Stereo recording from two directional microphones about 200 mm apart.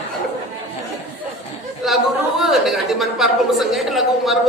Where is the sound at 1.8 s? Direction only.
Centre (ahead or behind).